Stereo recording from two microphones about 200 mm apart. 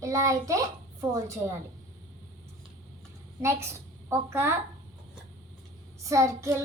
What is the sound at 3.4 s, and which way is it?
A child's voice, 15° right (ahead or behind).